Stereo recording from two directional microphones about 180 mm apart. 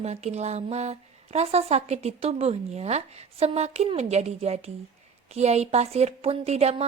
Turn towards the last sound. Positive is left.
turn(degrees=-35)  # may be behind; listen again after turning